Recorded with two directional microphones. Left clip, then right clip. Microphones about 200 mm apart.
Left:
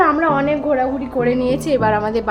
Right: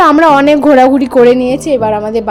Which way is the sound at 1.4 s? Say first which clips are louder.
Right 6 dB; 25° right (ahead or behind).